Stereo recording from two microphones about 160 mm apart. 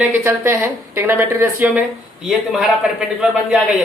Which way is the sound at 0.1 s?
15° right (ahead or behind).